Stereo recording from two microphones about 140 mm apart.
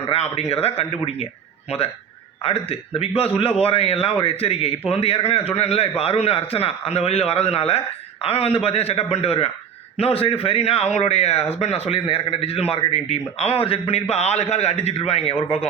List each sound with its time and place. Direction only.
0.1 s a man's voice: 50° left (ahead or behind)
2.4 s a man's voice: 45° left (ahead or behind)